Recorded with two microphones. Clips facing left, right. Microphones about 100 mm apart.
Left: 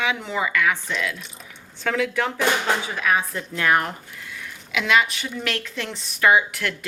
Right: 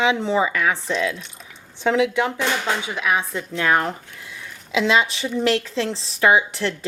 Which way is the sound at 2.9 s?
15° right (ahead or behind).